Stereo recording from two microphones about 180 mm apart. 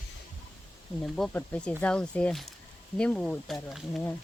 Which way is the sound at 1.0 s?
Centre (ahead or behind).